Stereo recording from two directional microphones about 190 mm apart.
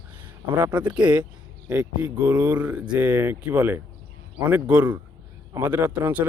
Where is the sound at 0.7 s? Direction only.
25° right (ahead or behind).